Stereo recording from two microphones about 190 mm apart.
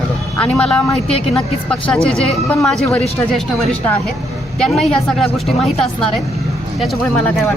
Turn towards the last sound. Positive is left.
turn(degrees=0)  # may be behind; listen again after turning